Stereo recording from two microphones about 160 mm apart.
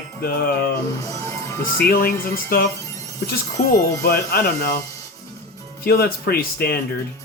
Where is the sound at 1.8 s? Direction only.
65° left (ahead or behind).